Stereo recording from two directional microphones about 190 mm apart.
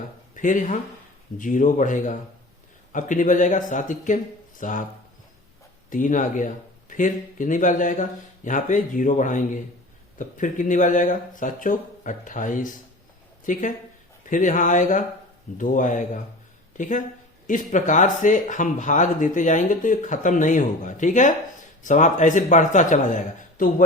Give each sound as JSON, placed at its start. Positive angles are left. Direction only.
{"t": 0.3, "sound": "speech", "side_deg": 45}
{"t": 5.9, "sound": "speech", "side_deg": 45}